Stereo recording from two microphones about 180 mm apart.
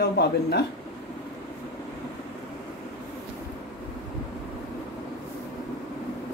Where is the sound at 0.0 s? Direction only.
65° left (ahead or behind).